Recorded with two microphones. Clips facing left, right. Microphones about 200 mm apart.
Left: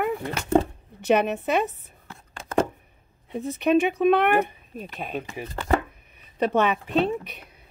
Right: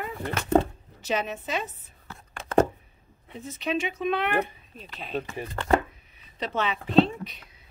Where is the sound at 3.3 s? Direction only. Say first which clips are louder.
Left 9 dB; 60° left (ahead or behind).